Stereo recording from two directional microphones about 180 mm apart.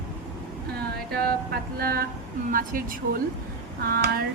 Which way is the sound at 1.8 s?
55° right (ahead or behind).